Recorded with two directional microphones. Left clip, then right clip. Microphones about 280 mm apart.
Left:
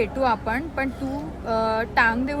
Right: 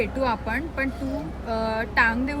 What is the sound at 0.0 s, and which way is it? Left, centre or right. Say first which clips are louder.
Speech: left 3 dB; centre.